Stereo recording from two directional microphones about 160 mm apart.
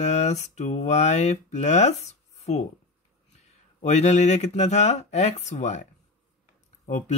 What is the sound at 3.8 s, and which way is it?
Speech, 45° left (ahead or behind).